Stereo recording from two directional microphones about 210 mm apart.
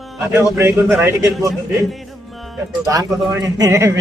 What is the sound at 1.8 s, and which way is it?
Music, centre (ahead or behind).